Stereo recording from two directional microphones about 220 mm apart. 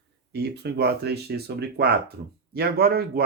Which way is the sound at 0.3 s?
50° right (ahead or behind).